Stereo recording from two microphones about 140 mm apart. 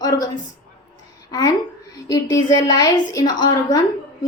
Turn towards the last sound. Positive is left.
turn(degrees=25)  # may be behind; listen again after turning